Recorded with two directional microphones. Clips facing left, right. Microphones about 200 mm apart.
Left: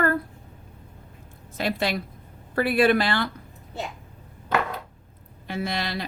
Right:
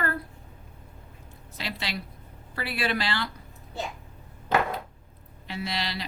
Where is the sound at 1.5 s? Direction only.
50° left (ahead or behind).